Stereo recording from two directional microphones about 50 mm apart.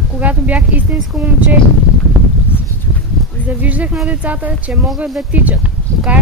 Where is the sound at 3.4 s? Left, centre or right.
Right.